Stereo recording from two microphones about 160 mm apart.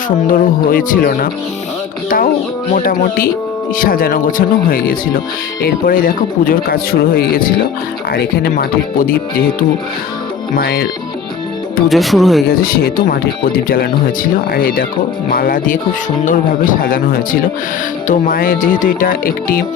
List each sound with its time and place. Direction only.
0.3 s speech: 60° left (ahead or behind)
2.0 s music: 60° left (ahead or behind)
2.7 s speech: 65° left (ahead or behind)
8.1 s speech: 85° left; by 9.6 s 65° left (ahead or behind)
10.5 s speech: 85° left
11.9 s speech: centre (ahead or behind)
12.5 s speech: 70° left (ahead or behind)